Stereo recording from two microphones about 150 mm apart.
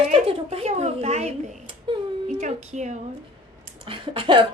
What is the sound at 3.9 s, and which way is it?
Speech, 35° right (ahead or behind).